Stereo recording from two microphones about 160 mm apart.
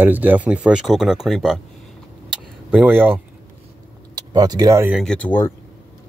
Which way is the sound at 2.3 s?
10° right (ahead or behind).